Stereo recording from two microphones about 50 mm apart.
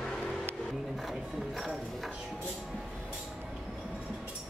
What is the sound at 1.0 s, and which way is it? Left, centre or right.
Speech, centre.